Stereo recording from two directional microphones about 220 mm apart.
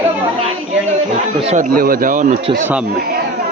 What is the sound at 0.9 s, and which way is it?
Speech, 30° right (ahead or behind).